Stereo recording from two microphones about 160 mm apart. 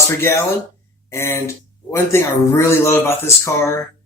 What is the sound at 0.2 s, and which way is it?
Speech, 15° left (ahead or behind).